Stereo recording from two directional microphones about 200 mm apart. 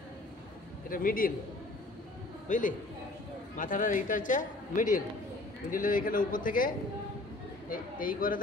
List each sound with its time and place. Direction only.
0.8 s a man's voice: 45° left (ahead or behind)
2.4 s a man's voice: 40° left (ahead or behind)
7.7 s speech: 45° left (ahead or behind)